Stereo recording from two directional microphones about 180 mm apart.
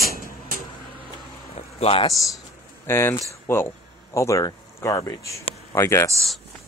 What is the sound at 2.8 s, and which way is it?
Speech, 15° left (ahead or behind).